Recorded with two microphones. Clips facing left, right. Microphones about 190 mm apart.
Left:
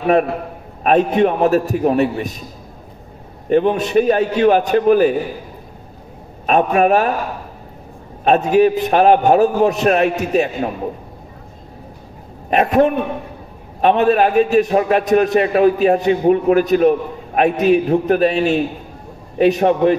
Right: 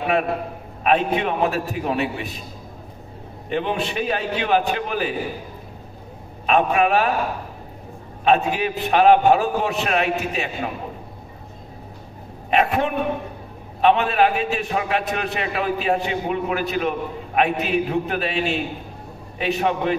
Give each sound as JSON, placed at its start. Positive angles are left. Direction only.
{"t": 0.8, "sound": "a man's voice", "side_deg": 45}
{"t": 3.4, "sound": "a man's voice", "side_deg": 45}
{"t": 6.4, "sound": "a man's voice", "side_deg": 45}
{"t": 8.2, "sound": "a man's voice", "side_deg": 45}
{"t": 12.4, "sound": "a man's voice", "side_deg": 40}